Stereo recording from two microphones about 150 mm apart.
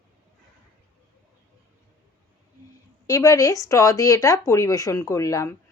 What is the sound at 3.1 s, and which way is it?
Speech, 20° left (ahead or behind).